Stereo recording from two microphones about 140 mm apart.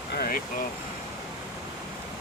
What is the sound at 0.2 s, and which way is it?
Vehicle, 90° left.